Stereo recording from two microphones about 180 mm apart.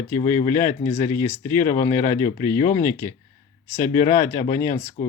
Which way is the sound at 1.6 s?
45° left (ahead or behind).